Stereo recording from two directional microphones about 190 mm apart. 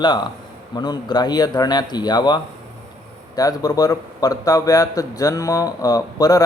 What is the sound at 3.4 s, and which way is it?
A man's voice, 20° left (ahead or behind).